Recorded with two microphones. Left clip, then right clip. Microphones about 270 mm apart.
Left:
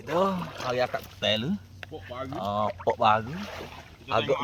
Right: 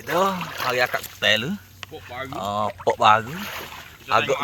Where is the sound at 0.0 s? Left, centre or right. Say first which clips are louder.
Right 5 dB; centre.